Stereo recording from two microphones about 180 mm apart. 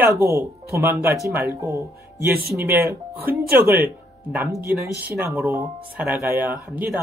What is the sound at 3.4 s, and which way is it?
Speech, 60° right (ahead or behind).